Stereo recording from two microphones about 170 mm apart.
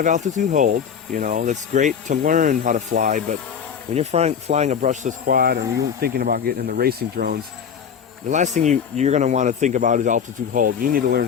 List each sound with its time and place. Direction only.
0.0 s speech: 45° right (ahead or behind)
3.9 s speech: 40° right (ahead or behind); by 7.3 s 65° right (ahead or behind)
8.3 s speech: 45° right (ahead or behind)